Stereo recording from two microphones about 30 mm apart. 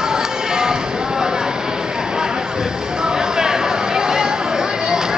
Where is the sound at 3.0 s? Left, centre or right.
Right.